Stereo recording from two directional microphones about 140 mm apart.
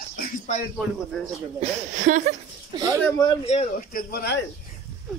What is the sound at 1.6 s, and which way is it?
Speech, 65° right (ahead or behind).